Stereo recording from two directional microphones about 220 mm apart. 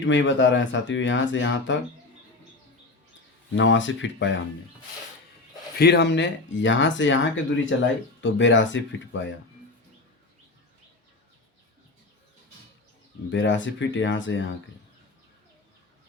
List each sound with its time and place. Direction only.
0.0 s speech: 60° left (ahead or behind)
3.5 s speech: 60° left (ahead or behind)
5.8 s speech: 50° left (ahead or behind)
13.3 s speech: 60° left (ahead or behind)